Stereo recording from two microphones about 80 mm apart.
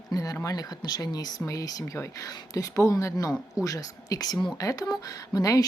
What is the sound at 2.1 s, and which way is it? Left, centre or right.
Speech, left.